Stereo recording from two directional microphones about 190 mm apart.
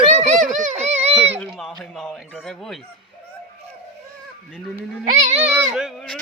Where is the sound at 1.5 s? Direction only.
Centre (ahead or behind).